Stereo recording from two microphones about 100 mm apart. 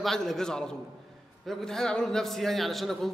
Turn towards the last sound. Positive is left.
turn(degrees=0)  # may be behind; listen again after turning